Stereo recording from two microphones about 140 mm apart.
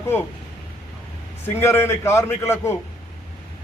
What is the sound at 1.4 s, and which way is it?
A man's voice, 15° left (ahead or behind).